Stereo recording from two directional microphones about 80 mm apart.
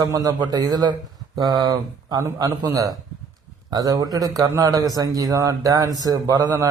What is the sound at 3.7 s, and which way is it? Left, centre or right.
A man's voice, right.